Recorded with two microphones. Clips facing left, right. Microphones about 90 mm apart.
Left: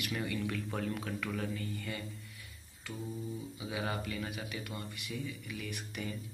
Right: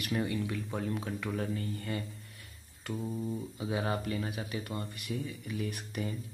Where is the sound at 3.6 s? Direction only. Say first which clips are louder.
Right 4 dB; 35° right (ahead or behind).